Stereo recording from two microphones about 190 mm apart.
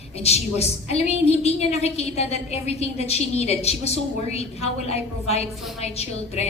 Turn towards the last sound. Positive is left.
turn(degrees=35)  # may be behind; listen again after turning